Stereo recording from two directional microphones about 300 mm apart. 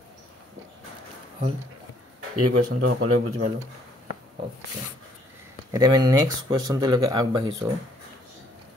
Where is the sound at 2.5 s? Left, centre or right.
Right.